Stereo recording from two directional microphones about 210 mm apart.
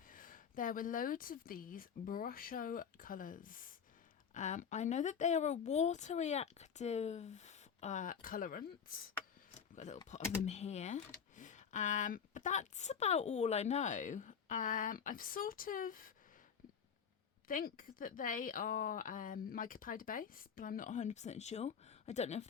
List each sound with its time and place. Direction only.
0.1 s speech: 40° left (ahead or behind)
9.6 s a sound: 35° left (ahead or behind)
10.4 s speech: 30° left (ahead or behind)
17.5 s speech: 40° left (ahead or behind)